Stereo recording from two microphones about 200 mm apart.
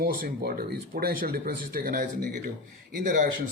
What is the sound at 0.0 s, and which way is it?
Speech, 45° right (ahead or behind).